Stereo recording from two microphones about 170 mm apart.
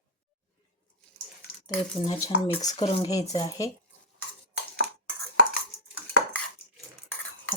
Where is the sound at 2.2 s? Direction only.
20° left (ahead or behind).